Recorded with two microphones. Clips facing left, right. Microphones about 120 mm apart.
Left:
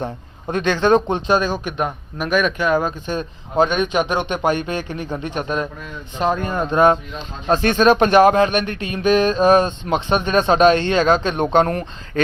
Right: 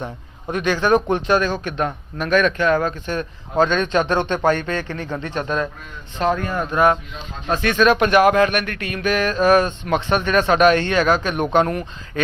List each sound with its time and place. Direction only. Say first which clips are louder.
0.0 s speech: left 3 dB; 30° left (ahead or behind)
11.6 s speech: left 1 dB; 40° left (ahead or behind)